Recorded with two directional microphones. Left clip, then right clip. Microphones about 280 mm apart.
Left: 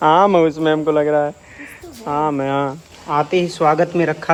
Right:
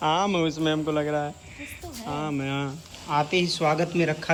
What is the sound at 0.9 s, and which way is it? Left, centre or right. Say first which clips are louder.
Speech: left 11 dB; left.